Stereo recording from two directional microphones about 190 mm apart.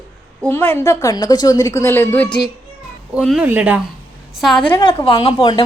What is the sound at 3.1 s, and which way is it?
A woman's voice, 5° right (ahead or behind).